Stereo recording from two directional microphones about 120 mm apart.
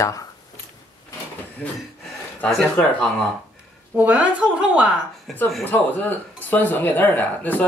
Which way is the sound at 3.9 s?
10° right (ahead or behind).